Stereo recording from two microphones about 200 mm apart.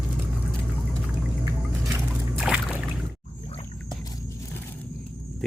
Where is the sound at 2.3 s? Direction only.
5° right (ahead or behind).